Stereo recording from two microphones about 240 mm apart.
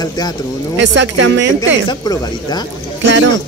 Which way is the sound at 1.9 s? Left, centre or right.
Centre.